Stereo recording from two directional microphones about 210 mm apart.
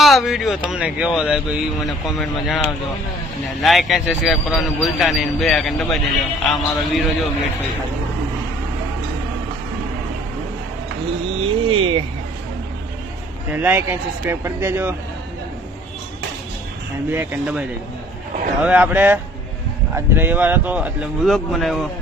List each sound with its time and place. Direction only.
0.0 s speech: centre (ahead or behind)
3.6 s speech: centre (ahead or behind)
11.3 s speech: 25° right (ahead or behind)
13.5 s speech: 10° right (ahead or behind)
17.1 s speech: 5° right (ahead or behind)
18.6 s speech: 5° right (ahead or behind)